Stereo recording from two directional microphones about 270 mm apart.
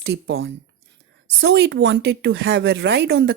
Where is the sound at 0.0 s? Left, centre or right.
Right.